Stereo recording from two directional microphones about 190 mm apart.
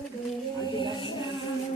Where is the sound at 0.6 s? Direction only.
25° left (ahead or behind).